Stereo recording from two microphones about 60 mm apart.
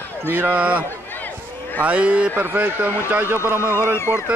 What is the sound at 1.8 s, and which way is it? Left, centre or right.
Speech, right.